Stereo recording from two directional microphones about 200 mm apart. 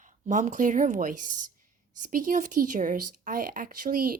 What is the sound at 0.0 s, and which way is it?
A woman's voice, 40° right (ahead or behind).